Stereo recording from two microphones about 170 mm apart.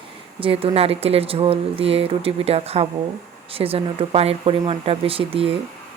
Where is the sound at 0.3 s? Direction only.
30° right (ahead or behind).